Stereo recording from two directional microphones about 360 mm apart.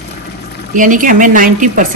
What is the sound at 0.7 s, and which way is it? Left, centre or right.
Speech, right.